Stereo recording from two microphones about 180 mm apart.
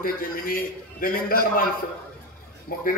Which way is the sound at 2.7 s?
55° left (ahead or behind).